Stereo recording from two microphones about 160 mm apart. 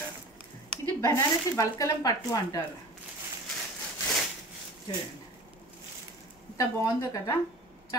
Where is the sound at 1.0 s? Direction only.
20° left (ahead or behind).